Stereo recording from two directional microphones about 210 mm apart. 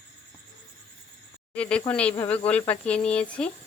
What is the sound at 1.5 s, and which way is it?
Cricket, 5° left (ahead or behind).